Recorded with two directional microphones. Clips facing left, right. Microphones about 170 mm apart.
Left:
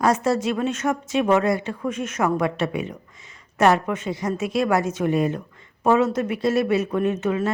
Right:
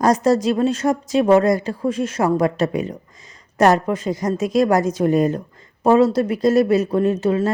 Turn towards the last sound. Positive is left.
turn(degrees=-35)  # may be behind; listen again after turning